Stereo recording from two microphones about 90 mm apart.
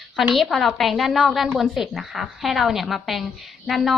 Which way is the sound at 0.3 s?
Centre (ahead or behind).